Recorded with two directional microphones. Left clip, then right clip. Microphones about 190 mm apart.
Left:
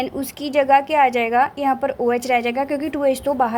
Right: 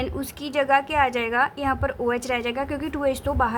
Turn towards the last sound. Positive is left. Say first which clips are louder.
# left 5 dB
turn(degrees=15)  # may be behind; listen again after turning